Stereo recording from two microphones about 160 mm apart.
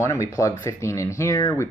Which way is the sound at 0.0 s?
20° left (ahead or behind).